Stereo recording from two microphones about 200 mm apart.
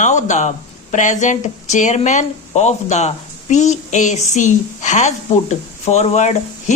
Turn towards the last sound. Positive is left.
turn(degrees=35)  # may be behind; listen again after turning